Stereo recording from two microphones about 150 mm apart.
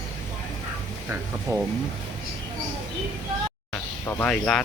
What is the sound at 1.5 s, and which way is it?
Speech, 20° right (ahead or behind).